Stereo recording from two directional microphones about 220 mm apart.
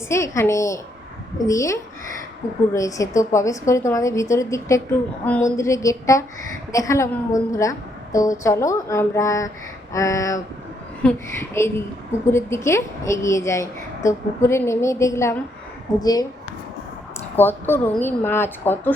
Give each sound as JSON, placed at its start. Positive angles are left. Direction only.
{"t": 0.1, "sound": "a woman's voice", "side_deg": 15}
{"t": 17.3, "sound": "a woman's voice", "side_deg": 10}